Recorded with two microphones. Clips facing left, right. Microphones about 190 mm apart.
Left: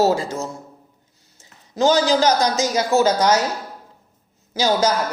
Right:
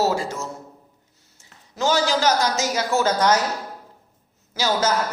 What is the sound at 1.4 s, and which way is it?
A woman's voice, 20° left (ahead or behind).